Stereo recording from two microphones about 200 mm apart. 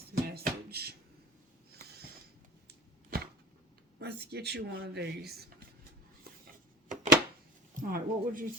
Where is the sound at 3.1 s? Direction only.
45° right (ahead or behind).